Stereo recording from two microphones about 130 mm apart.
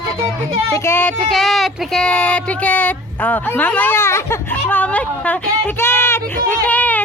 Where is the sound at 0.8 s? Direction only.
20° left (ahead or behind).